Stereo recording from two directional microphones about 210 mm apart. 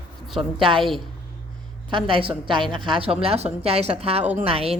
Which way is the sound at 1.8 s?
25° right (ahead or behind).